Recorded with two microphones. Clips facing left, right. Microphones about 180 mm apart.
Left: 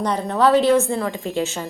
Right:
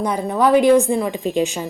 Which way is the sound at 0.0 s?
10° right (ahead or behind).